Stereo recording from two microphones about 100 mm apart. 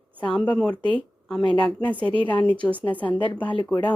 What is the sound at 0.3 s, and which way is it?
Speech, 10° left (ahead or behind).